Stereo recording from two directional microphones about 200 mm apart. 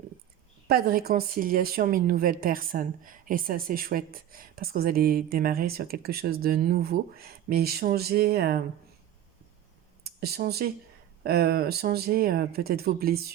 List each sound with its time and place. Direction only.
0.7 s speech: 50° right (ahead or behind)
10.0 s speech: 50° right (ahead or behind)